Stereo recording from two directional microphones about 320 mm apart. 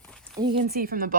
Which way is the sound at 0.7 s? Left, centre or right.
Right.